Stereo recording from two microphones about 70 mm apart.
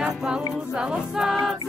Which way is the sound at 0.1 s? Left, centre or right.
Centre.